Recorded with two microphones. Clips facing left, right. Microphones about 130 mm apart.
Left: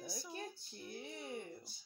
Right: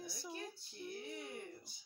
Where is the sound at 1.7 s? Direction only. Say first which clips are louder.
Left 3 dB; 15° right (ahead or behind).